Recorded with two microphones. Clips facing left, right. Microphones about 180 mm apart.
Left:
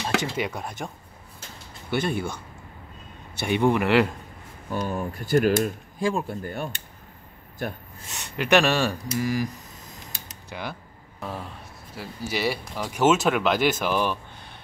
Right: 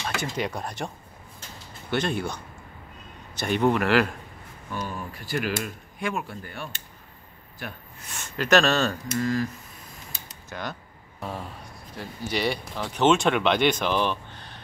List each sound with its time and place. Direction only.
0.4 s speech: 5° left (ahead or behind)
1.9 s speech: 10° left (ahead or behind)
4.7 s speech: 45° left (ahead or behind)
5.9 s speech: 30° left (ahead or behind)
6.2 s speech: 45° left (ahead or behind)
8.0 s speech: 15° left (ahead or behind)
10.5 s speech: 10° left (ahead or behind)
11.1 s a sound: centre (ahead or behind)
11.9 s speech: 5° left (ahead or behind)